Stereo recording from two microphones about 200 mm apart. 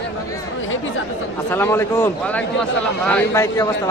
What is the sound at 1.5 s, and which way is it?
A man's voice, 10° left (ahead or behind).